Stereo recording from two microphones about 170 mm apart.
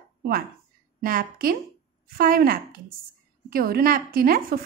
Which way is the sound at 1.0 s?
55° right (ahead or behind).